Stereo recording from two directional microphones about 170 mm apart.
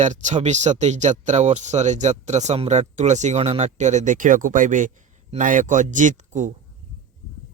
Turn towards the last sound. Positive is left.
turn(degrees=-45)  # may be behind; listen again after turning